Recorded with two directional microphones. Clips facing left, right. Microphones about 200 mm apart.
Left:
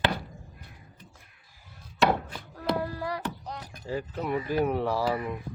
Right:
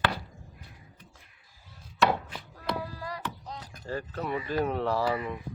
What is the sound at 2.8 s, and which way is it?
Music, 65° left (ahead or behind).